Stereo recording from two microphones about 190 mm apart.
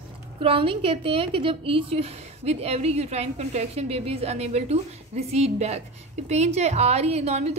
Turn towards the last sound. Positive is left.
turn(degrees=-35)  # may be behind; listen again after turning